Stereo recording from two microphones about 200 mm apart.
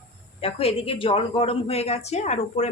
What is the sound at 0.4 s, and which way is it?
A woman's voice, 30° left (ahead or behind).